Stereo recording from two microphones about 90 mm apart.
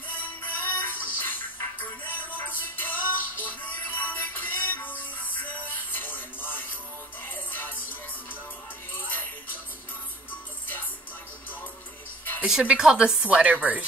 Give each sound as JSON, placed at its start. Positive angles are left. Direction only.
{"t": 0.1, "sound": "music", "side_deg": 20}
{"t": 8.9, "sound": "music", "side_deg": 20}
{"t": 12.4, "sound": "speech", "side_deg": -10}